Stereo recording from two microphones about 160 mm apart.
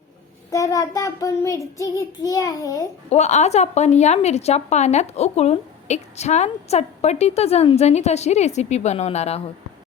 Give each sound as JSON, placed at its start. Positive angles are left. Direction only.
{"t": 0.5, "sound": "child singing", "side_deg": 20}
{"t": 3.1, "sound": "a woman's voice", "side_deg": 45}